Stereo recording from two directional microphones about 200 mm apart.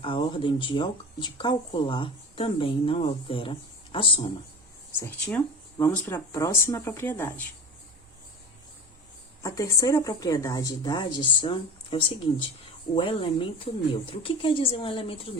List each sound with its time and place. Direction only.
0.0 s speech: 25° left (ahead or behind)
4.9 s speech: 10° left (ahead or behind)
9.4 s speech: 15° left (ahead or behind)